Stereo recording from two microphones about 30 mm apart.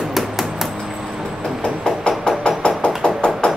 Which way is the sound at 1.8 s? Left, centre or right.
Left.